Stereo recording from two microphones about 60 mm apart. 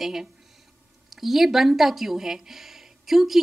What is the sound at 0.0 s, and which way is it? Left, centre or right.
A woman's voice, centre.